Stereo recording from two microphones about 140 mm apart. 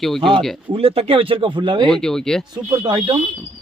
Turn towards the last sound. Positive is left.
turn(degrees=-30)  # may be behind; listen again after turning